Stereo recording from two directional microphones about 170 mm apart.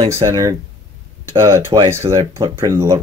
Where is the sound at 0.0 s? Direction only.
20° right (ahead or behind).